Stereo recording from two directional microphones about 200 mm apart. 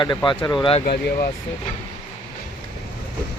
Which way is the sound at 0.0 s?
20° left (ahead or behind).